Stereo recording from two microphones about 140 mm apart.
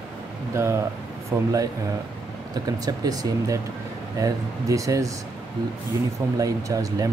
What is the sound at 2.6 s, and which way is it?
Speech, 30° right (ahead or behind).